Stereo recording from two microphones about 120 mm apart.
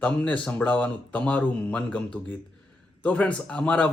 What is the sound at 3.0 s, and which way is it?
Speech, 10° left (ahead or behind).